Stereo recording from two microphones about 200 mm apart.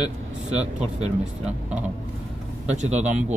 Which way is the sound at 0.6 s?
35° right (ahead or behind).